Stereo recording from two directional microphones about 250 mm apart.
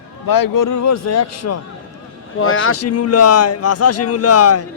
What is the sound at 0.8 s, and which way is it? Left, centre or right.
Speech, left.